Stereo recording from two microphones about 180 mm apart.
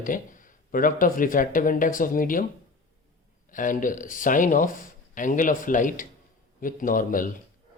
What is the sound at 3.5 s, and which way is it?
Speech, 45° left (ahead or behind).